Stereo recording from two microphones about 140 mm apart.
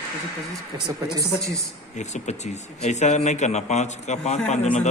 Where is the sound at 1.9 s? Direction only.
55° left (ahead or behind).